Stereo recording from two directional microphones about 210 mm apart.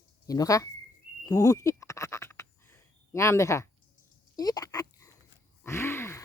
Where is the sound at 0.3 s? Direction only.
15° left (ahead or behind).